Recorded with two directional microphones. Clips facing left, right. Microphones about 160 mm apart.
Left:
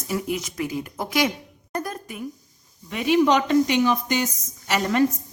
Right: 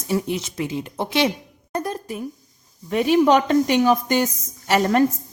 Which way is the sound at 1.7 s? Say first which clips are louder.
Right 4 dB; 30° right (ahead or behind).